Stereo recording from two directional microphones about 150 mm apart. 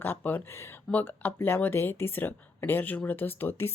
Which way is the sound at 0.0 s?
15° left (ahead or behind).